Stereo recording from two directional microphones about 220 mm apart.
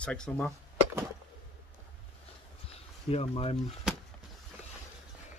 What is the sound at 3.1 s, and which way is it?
Speech, 25° left (ahead or behind).